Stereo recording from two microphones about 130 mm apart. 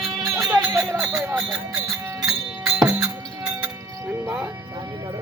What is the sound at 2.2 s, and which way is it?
Music, 25° right (ahead or behind).